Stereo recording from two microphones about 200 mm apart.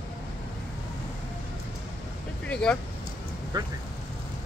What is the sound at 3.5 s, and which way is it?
Speech, 20° right (ahead or behind).